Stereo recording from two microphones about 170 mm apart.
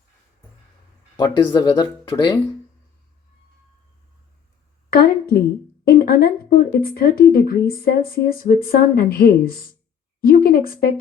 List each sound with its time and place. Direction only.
1.1 s speech: 25° left (ahead or behind)
4.9 s a woman's voice: 60° left (ahead or behind)